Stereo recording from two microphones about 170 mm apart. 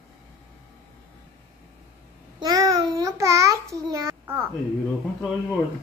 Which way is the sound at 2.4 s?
25° right (ahead or behind).